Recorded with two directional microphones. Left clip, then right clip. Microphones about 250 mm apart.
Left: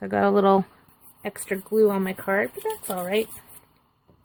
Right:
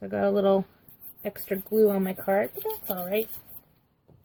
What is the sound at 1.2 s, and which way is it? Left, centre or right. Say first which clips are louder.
A woman's voice: left 2 dB; centre.